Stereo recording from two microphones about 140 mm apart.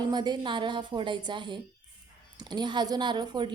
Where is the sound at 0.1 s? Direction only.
30° right (ahead or behind).